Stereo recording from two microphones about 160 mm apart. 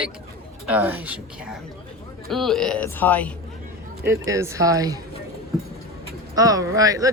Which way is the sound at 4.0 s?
20° right (ahead or behind).